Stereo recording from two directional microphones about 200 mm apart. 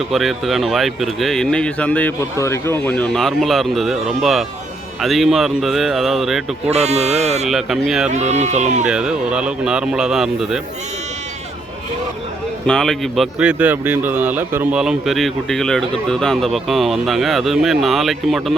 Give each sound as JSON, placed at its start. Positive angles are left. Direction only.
{"t": 0.1, "sound": "speech", "side_deg": 0}
{"t": 6.7, "sound": "speech", "side_deg": -35}
{"t": 7.4, "sound": "speech", "side_deg": 0}
{"t": 8.1, "sound": "speech", "side_deg": -35}
{"t": 8.9, "sound": "speech", "side_deg": -5}
{"t": 12.6, "sound": "speech", "side_deg": 5}